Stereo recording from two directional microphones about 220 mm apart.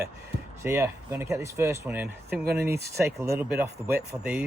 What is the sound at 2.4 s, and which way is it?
Speech, 45° right (ahead or behind).